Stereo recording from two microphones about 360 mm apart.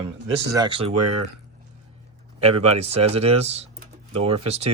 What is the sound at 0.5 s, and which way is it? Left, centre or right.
Speech, centre.